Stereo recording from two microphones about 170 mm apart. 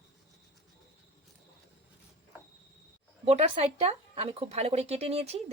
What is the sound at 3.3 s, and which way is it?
Speech, 35° right (ahead or behind).